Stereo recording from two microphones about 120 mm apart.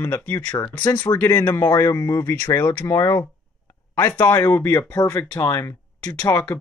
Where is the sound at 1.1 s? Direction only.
15° left (ahead or behind).